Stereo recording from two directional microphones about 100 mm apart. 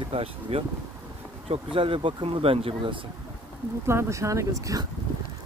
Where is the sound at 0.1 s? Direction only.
70° right (ahead or behind).